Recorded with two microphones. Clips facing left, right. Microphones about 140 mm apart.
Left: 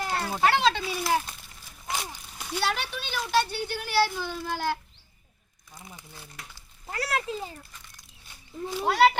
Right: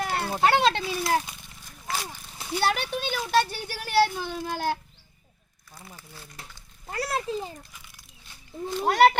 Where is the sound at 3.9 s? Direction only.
45° right (ahead or behind).